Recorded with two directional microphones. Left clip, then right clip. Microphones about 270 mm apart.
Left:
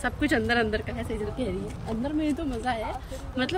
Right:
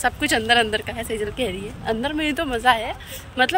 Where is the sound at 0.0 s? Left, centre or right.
Centre.